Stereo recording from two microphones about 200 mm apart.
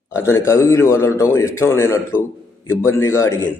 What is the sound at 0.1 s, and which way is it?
A man's voice, 10° left (ahead or behind).